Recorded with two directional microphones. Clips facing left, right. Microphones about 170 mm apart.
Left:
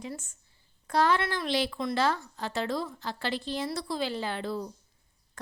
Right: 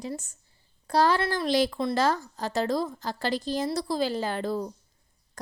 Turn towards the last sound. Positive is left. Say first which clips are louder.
# right 4 dB
turn(degrees=-40)  # may be behind; listen again after turning